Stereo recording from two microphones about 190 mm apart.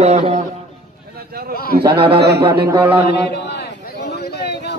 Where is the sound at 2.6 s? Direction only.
10° right (ahead or behind).